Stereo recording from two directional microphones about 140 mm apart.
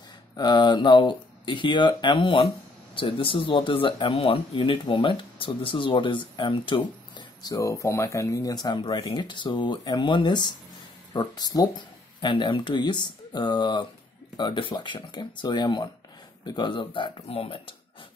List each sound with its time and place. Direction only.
0.4 s speech: 30° left (ahead or behind)